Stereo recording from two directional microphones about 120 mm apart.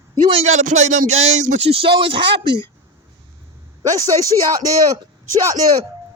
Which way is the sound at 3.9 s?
30° right (ahead or behind).